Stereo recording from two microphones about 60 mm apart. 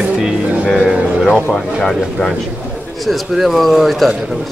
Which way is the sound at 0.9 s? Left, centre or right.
Centre.